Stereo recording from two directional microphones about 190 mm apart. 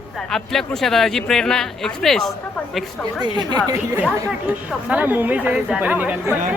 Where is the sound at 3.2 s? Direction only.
20° right (ahead or behind).